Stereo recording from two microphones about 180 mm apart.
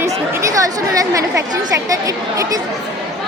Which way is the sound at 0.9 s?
20° right (ahead or behind).